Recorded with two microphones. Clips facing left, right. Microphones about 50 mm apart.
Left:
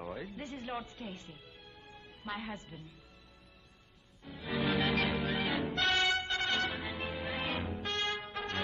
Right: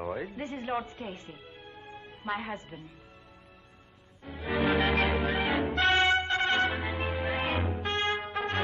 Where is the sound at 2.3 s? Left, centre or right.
Right.